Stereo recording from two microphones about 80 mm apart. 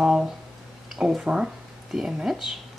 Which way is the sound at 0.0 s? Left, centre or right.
Centre.